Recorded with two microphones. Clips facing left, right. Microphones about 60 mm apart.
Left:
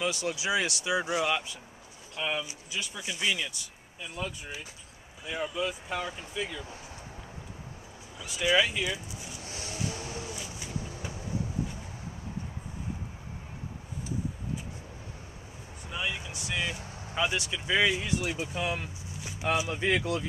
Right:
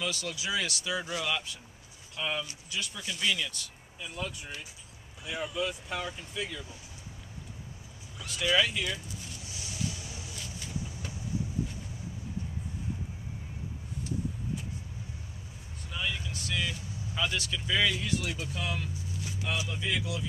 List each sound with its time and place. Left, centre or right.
0.0 s speech: left; by 6.6 s centre
8.2 s speech: centre
9.4 s a sound: left
10.3 s a sound: centre
15.9 s vehicle: centre
16.8 s vehicle: left
17.1 s speech: left
19.7 s speech: left